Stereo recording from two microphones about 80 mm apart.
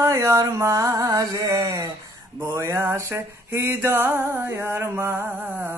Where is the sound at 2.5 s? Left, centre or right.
Right.